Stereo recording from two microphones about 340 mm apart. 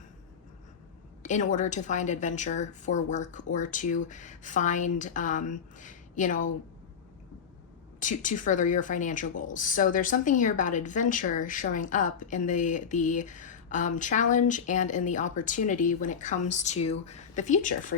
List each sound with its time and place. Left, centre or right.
1.2 s a woman's voice: left
7.9 s a woman's voice: left